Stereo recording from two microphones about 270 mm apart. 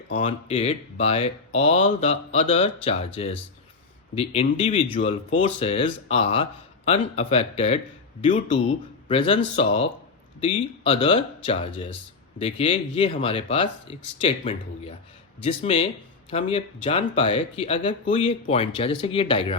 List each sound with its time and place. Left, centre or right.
0.1 s speech: left
9.0 s speech: left
10.4 s speech: centre